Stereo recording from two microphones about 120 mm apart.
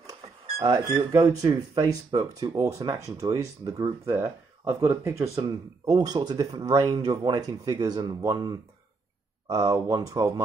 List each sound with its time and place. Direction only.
0.7 s speech: 25° right (ahead or behind)
4.0 s speech: 20° right (ahead or behind)